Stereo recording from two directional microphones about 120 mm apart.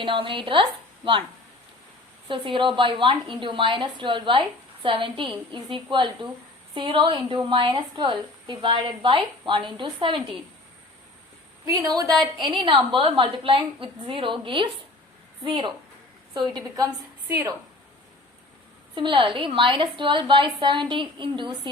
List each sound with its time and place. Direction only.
0.0 s a woman's voice: 45° right (ahead or behind)
2.2 s a woman's voice: 45° right (ahead or behind)
11.6 s a woman's voice: 30° right (ahead or behind)
18.9 s a woman's voice: 40° right (ahead or behind)